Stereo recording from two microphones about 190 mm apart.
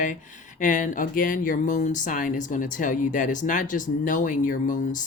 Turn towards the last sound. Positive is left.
turn(degrees=45)  # may be behind; listen again after turning